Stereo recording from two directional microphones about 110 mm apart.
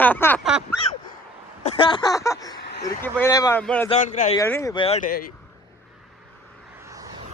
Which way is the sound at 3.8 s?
90° left.